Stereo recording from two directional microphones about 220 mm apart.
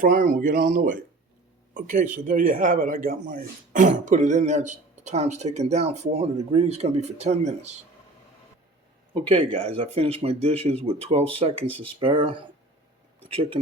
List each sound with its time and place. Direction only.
0.0 s speech: 35° right (ahead or behind)
9.2 s speech: 25° right (ahead or behind)